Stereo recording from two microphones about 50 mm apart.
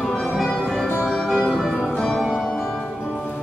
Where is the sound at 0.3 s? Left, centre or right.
Centre.